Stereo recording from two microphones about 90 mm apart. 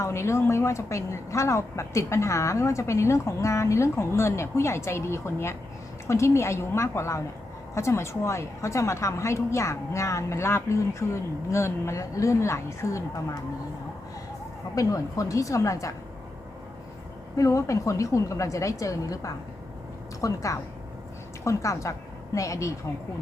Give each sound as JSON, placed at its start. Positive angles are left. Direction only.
{"t": 0.0, "sound": "a woman's voice", "side_deg": 30}
{"t": 14.8, "sound": "a woman's voice", "side_deg": 40}
{"t": 17.3, "sound": "a woman's voice", "side_deg": 35}